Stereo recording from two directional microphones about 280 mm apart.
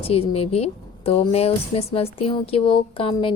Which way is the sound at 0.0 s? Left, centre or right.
Left.